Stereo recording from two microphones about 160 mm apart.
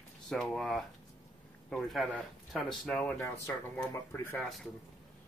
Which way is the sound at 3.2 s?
15° left (ahead or behind).